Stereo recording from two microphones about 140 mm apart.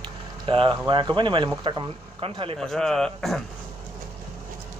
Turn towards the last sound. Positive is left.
turn(degrees=0)  # may be behind; listen again after turning